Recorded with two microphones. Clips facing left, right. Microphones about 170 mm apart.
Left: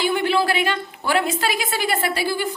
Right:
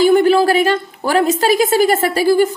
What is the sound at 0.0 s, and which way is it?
A woman's voice, 45° right (ahead or behind).